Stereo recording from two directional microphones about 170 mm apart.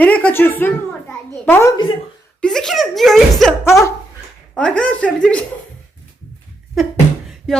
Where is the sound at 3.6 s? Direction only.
15° left (ahead or behind).